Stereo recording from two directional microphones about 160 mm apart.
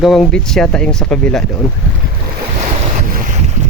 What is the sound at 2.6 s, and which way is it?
Boat, 50° right (ahead or behind).